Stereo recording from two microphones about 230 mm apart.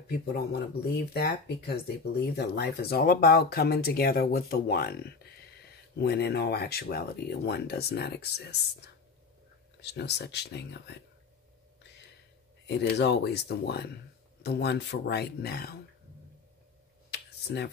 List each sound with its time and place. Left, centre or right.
0.2 s speech: left
2.3 s speech: left
12.6 s speech: left
17.1 s a sound: left